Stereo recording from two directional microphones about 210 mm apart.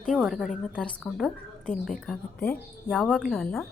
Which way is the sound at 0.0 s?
Centre (ahead or behind).